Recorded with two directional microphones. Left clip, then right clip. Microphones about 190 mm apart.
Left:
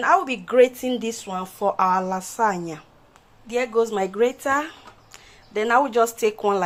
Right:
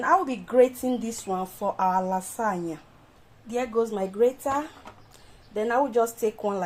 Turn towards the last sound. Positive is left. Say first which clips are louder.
# left 6 dB
turn(degrees=15)  # may be behind; listen again after turning